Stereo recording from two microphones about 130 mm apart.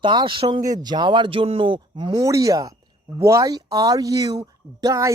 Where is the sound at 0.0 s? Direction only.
40° right (ahead or behind).